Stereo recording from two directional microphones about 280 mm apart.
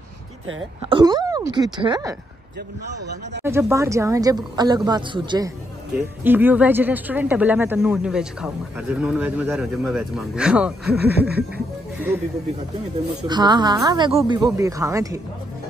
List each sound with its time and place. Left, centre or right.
0.8 s a woman's voice: centre
2.9 s a man's voice: right
3.4 s a woman's voice: centre
11.5 s music: centre
13.3 s a woman's voice: centre